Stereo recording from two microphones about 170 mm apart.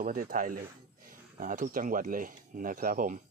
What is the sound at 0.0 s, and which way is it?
Speech, 55° right (ahead or behind).